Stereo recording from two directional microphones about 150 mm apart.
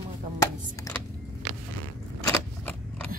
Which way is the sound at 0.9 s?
20° left (ahead or behind).